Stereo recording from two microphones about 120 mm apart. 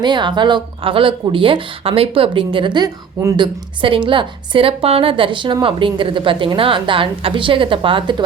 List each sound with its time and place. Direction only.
0.0 s a woman's voice: 40° right (ahead or behind)